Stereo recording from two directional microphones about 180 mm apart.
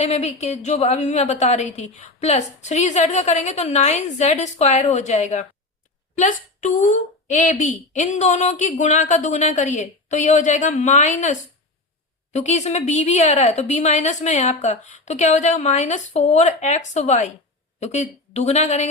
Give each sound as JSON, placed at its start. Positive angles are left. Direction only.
{"t": 0.0, "sound": "a woman's voice", "side_deg": 35}